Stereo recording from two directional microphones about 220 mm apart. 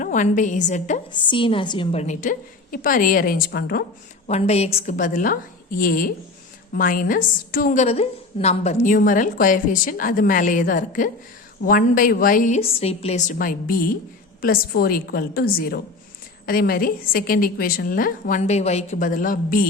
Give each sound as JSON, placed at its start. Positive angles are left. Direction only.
{"t": 0.0, "sound": "a woman's voice", "side_deg": 35}
{"t": 1.3, "sound": "a woman's voice", "side_deg": 25}
{"t": 4.3, "sound": "a woman's voice", "side_deg": 30}